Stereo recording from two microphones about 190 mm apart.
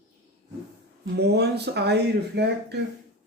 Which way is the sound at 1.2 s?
60° right (ahead or behind).